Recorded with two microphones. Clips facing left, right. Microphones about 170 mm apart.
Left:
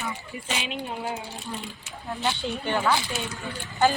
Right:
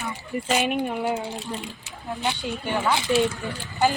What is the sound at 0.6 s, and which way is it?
Speech, 55° right (ahead or behind).